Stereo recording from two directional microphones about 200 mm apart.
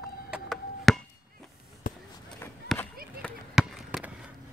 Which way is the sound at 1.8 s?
45° left (ahead or behind).